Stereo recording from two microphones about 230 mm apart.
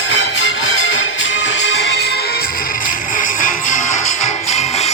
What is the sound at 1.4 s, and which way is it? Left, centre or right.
Music, left.